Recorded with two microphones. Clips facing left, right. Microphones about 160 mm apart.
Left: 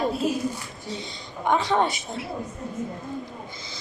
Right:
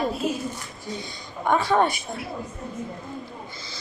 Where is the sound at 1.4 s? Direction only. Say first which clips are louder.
Right 1 dB; 20° left (ahead or behind).